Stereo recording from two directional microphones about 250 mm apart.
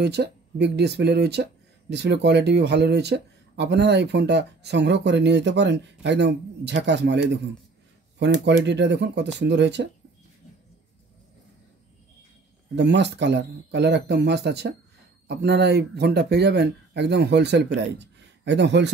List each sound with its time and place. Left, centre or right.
0.0 s speech: right
12.7 s speech: right